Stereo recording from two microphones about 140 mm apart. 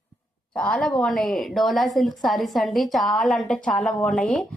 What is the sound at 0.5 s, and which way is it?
A woman's voice, 5° left (ahead or behind).